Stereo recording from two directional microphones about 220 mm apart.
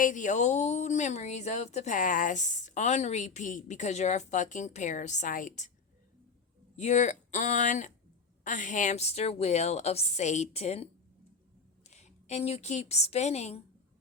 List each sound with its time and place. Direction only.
0.0 s a woman's voice: 35° left (ahead or behind)
6.7 s a woman's voice: 30° left (ahead or behind)